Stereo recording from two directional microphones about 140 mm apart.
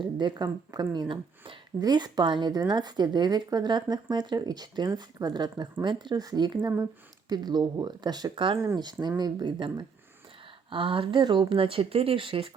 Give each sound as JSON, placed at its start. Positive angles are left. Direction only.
{"t": 0.0, "sound": "speech", "side_deg": -30}
{"t": 8.5, "sound": "speech", "side_deg": -20}
{"t": 8.8, "sound": "speech", "side_deg": -30}